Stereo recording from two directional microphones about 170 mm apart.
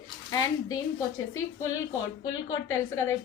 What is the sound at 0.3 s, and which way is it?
A woman's voice, 20° left (ahead or behind).